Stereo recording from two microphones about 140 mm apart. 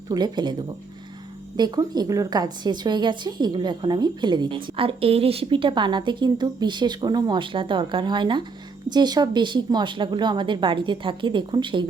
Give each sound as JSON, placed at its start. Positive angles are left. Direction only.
{"t": 0.1, "sound": "a woman's voice", "side_deg": -30}
{"t": 1.5, "sound": "a woman's voice", "side_deg": -30}